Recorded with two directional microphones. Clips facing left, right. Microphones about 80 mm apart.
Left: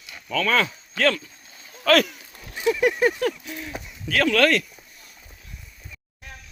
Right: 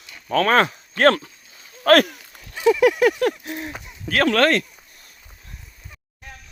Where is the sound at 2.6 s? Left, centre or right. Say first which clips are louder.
Right 5 dB; right.